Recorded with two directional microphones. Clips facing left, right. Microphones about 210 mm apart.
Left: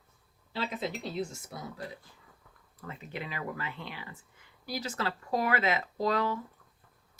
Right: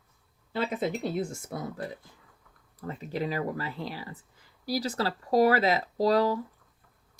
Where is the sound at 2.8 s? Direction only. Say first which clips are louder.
Right 8 dB; 40° right (ahead or behind).